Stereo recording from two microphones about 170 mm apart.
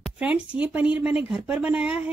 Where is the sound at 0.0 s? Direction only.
5° right (ahead or behind).